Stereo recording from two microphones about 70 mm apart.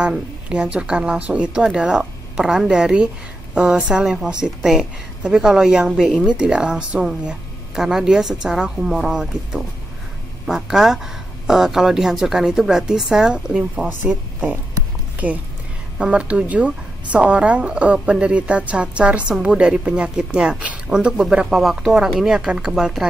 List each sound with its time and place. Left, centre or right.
0.5 s a woman's voice: centre
15.2 s a woman's voice: right; by 23.0 s centre